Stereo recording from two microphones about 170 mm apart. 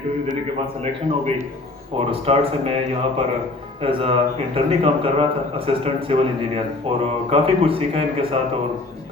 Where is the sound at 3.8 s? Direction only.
35° right (ahead or behind).